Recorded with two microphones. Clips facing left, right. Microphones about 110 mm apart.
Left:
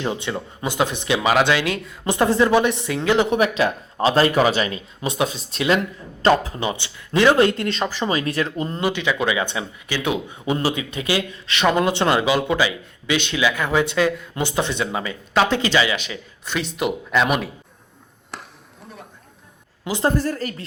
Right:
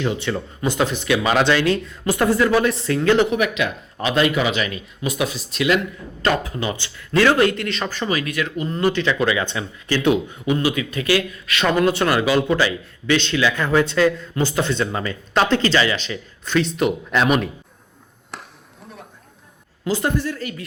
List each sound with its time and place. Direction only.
0.0 s a man's voice: 20° left (ahead or behind)
1.3 s a man's voice: 10° left (ahead or behind)
2.0 s a man's voice: 25° left (ahead or behind)
3.2 s a man's voice: 30° left (ahead or behind)
8.8 s a man's voice: 15° left (ahead or behind)
18.3 s chop: centre (ahead or behind)
19.8 s a woman's voice: 20° left (ahead or behind)
20.1 s a man's voice: 40° left (ahead or behind)